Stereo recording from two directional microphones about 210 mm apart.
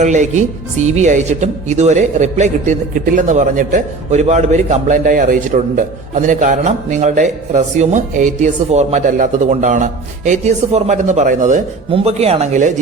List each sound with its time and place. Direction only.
0.0 s speech: 35° right (ahead or behind)